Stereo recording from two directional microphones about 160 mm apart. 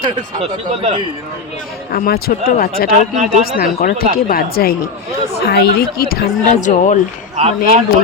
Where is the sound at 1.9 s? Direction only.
70° left (ahead or behind).